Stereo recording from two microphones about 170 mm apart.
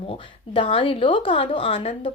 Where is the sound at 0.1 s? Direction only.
30° left (ahead or behind).